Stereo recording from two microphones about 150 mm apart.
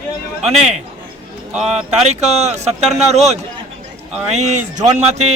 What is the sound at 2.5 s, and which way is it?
A man's voice, 50° right (ahead or behind).